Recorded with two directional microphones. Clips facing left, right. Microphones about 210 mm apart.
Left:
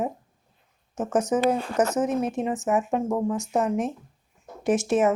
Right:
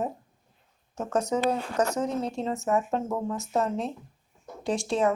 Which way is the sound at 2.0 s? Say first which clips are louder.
Left 4 dB; 20° left (ahead or behind).